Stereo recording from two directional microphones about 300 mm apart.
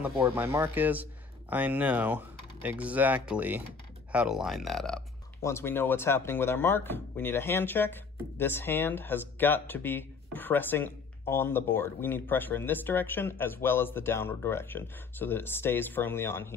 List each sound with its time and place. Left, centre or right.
0.0 s speech: centre